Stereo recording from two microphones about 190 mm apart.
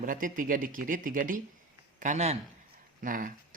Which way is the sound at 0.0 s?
45° right (ahead or behind).